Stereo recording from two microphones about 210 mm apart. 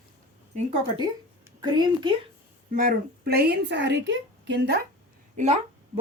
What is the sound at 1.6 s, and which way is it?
Speech, 20° right (ahead or behind).